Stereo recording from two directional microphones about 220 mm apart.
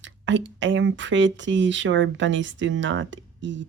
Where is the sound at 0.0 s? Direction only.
55° right (ahead or behind).